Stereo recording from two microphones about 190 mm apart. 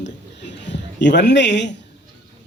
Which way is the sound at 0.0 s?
65° left (ahead or behind).